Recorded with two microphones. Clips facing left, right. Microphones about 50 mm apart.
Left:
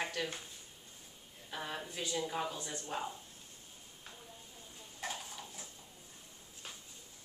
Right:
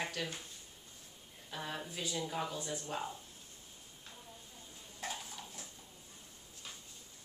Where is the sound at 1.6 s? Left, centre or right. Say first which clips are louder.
Even; centre.